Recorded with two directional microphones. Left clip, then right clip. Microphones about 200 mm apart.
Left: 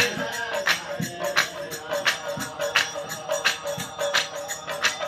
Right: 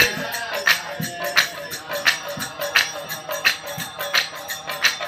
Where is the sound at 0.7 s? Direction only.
50° left (ahead or behind).